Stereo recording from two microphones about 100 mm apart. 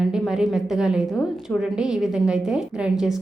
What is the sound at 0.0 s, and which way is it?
A woman's voice, 5° right (ahead or behind).